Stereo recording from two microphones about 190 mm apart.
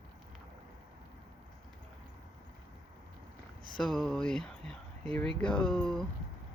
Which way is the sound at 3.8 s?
Centre (ahead or behind).